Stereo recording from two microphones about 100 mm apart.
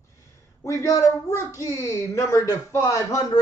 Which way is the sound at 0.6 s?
35° left (ahead or behind).